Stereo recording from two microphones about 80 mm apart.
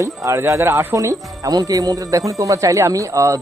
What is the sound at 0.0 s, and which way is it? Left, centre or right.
Speech, right.